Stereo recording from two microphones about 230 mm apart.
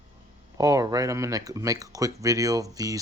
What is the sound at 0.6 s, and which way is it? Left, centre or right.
Speech, centre.